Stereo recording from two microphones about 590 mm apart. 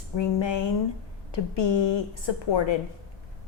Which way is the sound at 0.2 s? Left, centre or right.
Left.